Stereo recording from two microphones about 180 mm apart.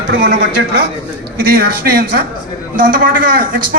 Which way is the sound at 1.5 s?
60° right (ahead or behind).